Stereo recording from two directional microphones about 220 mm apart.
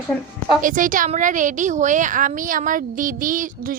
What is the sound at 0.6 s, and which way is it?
A woman's voice, 35° right (ahead or behind).